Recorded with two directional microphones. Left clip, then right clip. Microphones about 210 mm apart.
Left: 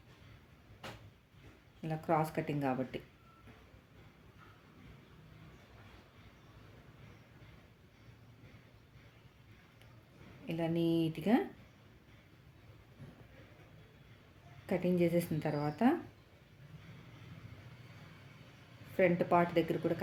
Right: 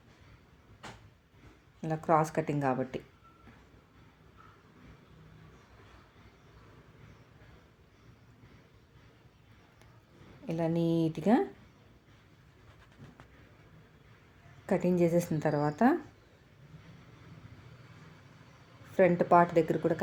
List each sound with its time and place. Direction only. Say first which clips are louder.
1.8 s speech: right 6 dB; 20° right (ahead or behind)
10.4 s a sound: right 3 dB; 20° right (ahead or behind)
14.7 s a woman's voice: right 5 dB; 20° right (ahead or behind)
18.9 s a woman's voice: right 6 dB; 20° right (ahead or behind)